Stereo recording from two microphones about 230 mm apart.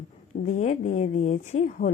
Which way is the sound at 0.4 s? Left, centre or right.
Left.